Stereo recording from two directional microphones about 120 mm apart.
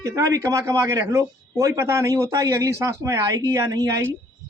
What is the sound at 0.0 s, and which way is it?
Speech, 25° right (ahead or behind).